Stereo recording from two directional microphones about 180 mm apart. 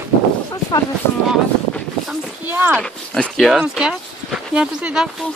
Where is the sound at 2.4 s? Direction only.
10° right (ahead or behind).